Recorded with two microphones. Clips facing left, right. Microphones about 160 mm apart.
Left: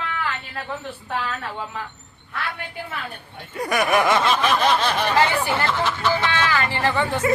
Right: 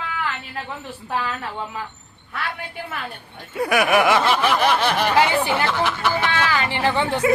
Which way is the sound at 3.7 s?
10° right (ahead or behind).